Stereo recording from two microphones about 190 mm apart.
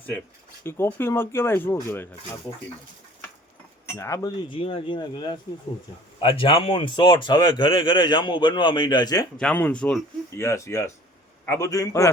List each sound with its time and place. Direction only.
0.6 s speech: 10° left (ahead or behind)
3.8 s a man's voice: 15° left (ahead or behind)
9.4 s speech: 5° left (ahead or behind)